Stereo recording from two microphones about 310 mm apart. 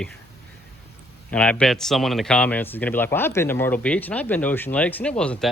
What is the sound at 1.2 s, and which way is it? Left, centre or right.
A man's voice, centre.